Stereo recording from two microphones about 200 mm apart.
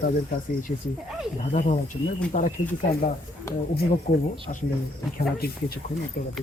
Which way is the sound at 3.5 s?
15° left (ahead or behind).